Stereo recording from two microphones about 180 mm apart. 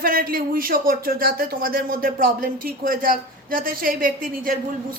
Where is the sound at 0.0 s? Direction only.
55° right (ahead or behind).